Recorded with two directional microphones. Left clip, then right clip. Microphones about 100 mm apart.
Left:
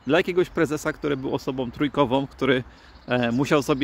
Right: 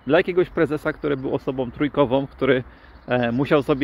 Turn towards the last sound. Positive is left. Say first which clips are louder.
# right 2 dB
turn(degrees=30)  # may be behind; listen again after turning